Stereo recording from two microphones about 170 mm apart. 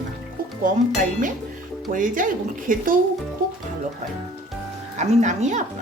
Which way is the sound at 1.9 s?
50° right (ahead or behind).